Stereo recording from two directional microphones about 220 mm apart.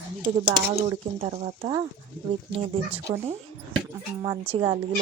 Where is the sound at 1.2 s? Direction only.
25° right (ahead or behind).